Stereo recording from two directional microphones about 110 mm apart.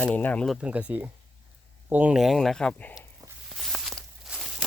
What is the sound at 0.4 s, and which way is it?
Speech, centre (ahead or behind).